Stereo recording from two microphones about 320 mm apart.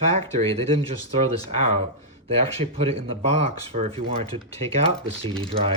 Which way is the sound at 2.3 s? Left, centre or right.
Centre.